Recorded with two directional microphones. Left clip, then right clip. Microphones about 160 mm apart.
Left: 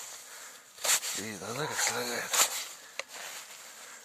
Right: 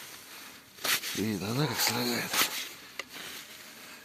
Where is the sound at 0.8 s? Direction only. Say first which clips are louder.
Even; 90° left.